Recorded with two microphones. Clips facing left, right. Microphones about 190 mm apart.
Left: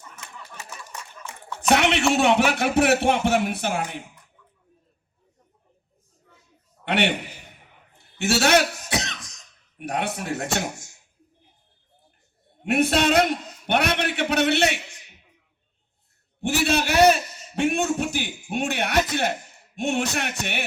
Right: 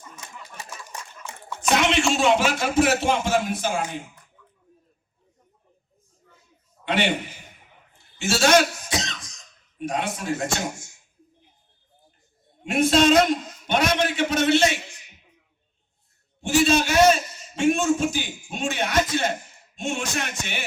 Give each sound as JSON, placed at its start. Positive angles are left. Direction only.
{"t": 1.5, "sound": "speech", "side_deg": 65}
{"t": 6.8, "sound": "a man's voice", "side_deg": 65}
{"t": 7.9, "sound": "cough", "side_deg": 65}
{"t": 9.7, "sound": "a man's voice", "side_deg": 65}
{"t": 12.6, "sound": "a man's voice", "side_deg": 65}
{"t": 16.4, "sound": "a man's voice", "side_deg": 60}